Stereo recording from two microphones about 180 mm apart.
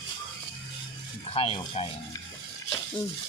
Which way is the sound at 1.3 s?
30° left (ahead or behind).